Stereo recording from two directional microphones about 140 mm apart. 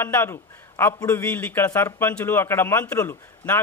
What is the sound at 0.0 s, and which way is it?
A man's voice, 15° left (ahead or behind).